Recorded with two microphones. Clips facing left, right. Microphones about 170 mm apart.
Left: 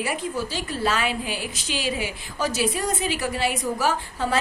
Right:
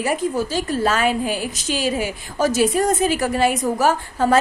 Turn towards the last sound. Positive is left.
turn(degrees=-45)  # may be behind; listen again after turning